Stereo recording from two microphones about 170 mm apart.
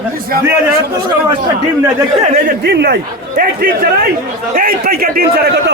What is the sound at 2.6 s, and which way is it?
A man's voice, 75° right (ahead or behind).